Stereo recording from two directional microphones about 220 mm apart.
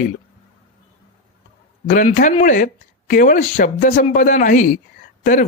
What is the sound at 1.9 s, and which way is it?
Speech, 35° left (ahead or behind).